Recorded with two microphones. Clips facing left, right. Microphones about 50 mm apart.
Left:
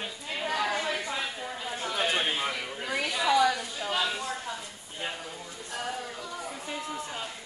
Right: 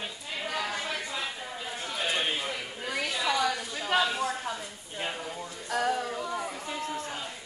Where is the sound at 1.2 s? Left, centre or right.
Centre.